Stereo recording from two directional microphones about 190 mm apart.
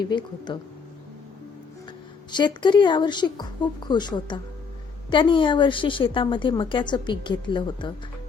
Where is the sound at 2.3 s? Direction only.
25° left (ahead or behind).